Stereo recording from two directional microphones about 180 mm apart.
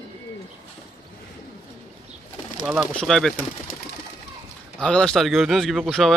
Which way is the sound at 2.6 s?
Centre (ahead or behind).